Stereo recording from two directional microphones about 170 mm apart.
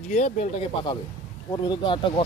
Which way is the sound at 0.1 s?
45° left (ahead or behind).